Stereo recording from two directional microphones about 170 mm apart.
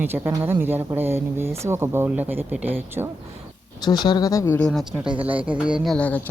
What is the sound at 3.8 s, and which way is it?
Speech, 25° left (ahead or behind).